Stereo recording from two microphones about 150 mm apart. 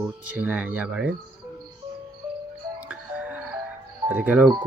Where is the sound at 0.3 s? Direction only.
10° right (ahead or behind).